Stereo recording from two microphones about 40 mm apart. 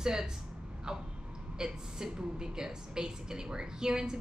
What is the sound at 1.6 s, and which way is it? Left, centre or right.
A woman's voice, centre.